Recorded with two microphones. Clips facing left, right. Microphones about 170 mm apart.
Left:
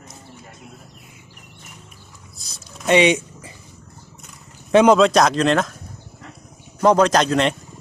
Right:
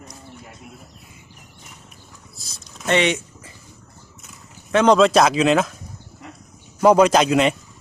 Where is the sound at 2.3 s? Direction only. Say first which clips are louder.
Left 3 dB; centre (ahead or behind).